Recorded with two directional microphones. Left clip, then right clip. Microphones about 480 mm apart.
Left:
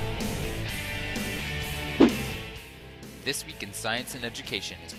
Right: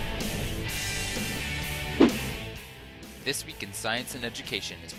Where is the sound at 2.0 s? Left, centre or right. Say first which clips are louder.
Left 1 dB; centre.